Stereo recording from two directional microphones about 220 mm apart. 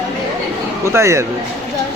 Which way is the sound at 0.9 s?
10° right (ahead or behind).